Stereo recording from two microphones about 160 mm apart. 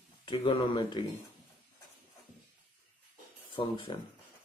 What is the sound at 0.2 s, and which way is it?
Speech, 30° left (ahead or behind).